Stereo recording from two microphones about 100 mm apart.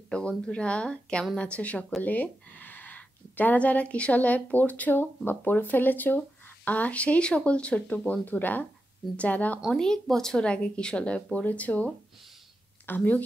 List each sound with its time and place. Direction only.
0.1 s speech: 10° left (ahead or behind)
9.6 s a woman's voice: centre (ahead or behind)